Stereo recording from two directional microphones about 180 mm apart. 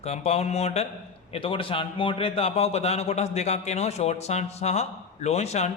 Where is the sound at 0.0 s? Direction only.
35° left (ahead or behind).